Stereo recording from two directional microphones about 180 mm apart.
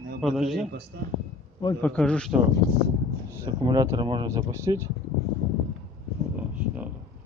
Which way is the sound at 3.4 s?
25° right (ahead or behind).